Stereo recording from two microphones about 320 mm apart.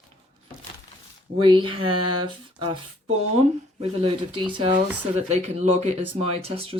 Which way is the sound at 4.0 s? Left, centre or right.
Centre.